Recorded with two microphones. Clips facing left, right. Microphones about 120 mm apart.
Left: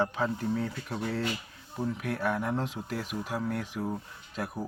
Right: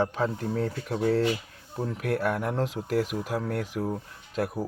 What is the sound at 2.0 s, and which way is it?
Speech, 55° right (ahead or behind).